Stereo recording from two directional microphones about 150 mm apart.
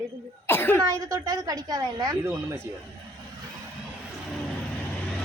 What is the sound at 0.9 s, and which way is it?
A woman's voice, 20° right (ahead or behind).